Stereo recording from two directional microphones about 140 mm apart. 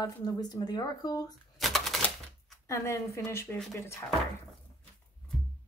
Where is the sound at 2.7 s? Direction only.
20° left (ahead or behind).